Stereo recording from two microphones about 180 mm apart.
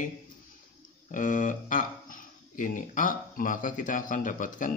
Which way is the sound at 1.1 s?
45° left (ahead or behind).